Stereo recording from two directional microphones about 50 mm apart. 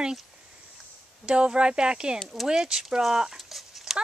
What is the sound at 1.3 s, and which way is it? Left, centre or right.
Speech, centre.